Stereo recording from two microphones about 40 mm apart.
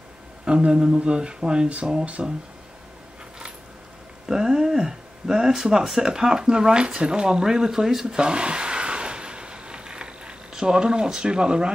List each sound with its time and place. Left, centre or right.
0.5 s speech: right
2.2 s speech: centre
4.3 s a sound: centre
5.9 s speech: centre
8.2 s a sound: right
10.5 s speech: right